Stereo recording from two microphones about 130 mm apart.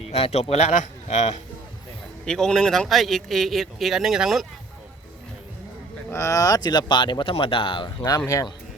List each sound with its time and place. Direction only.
0.1 s speech: 55° left (ahead or behind)
2.2 s speech: 5° left (ahead or behind)
6.1 s speech: 20° left (ahead or behind); by 8.0 s 40° left (ahead or behind)
8.3 s speech: 25° left (ahead or behind)